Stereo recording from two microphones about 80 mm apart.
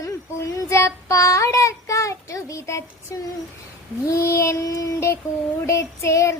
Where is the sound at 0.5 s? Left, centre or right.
Left.